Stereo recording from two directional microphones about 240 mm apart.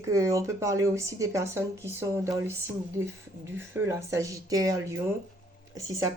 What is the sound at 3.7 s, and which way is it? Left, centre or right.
Speech, centre.